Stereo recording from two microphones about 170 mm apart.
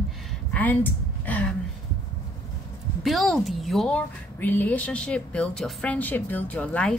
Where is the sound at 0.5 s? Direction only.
10° left (ahead or behind).